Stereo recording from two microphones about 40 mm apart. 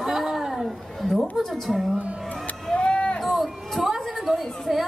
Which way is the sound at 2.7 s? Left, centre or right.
Left.